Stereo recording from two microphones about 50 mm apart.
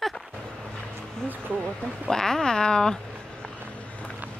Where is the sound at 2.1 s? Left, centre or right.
Centre.